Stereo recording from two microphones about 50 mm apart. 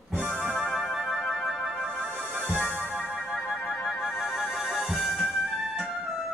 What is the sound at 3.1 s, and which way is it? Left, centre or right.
Music, centre.